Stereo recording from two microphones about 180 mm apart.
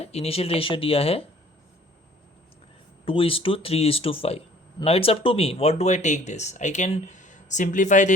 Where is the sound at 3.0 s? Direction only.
30° left (ahead or behind).